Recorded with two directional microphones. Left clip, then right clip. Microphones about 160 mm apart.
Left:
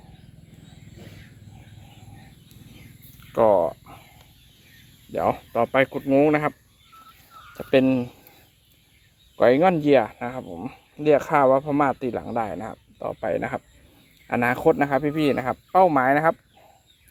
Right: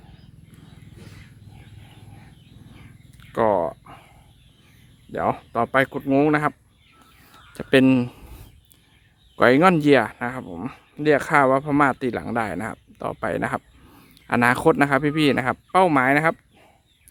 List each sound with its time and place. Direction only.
3.3 s a sound: 15° right (ahead or behind)
5.1 s speech: 10° right (ahead or behind)
7.5 s speech: 30° right (ahead or behind)
9.3 s speech: 35° right (ahead or behind)